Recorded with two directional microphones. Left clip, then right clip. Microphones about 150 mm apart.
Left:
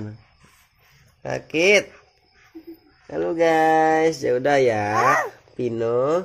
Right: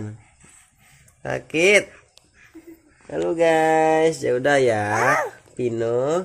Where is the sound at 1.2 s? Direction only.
30° right (ahead or behind).